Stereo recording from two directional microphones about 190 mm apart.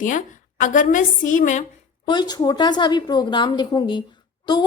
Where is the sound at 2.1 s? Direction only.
20° left (ahead or behind).